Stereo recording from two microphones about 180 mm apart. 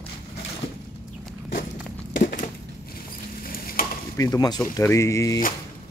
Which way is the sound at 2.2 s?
50° left (ahead or behind).